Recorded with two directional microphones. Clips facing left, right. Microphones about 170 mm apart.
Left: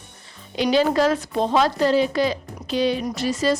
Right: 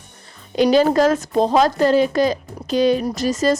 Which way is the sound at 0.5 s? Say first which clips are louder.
Right 4 dB; 45° right (ahead or behind).